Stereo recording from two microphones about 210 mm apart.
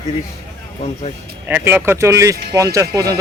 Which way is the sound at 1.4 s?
10° right (ahead or behind).